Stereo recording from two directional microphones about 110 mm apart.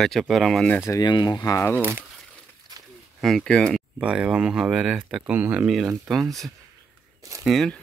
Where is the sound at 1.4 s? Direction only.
30° left (ahead or behind).